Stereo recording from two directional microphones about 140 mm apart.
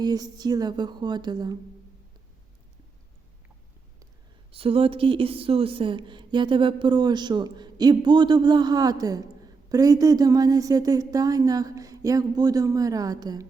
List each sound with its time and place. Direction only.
0.0 s speech: 30° right (ahead or behind)
4.5 s speech: 40° right (ahead or behind)